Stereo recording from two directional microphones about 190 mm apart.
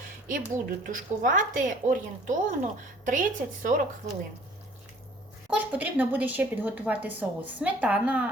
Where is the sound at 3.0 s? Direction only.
40° right (ahead or behind).